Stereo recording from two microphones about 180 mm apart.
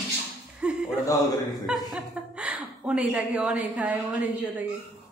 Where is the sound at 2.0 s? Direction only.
5° right (ahead or behind).